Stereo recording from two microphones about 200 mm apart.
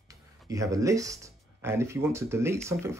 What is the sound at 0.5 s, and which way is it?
Speech, 15° right (ahead or behind).